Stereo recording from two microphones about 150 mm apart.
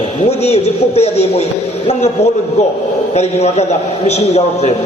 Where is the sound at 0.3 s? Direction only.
45° left (ahead or behind).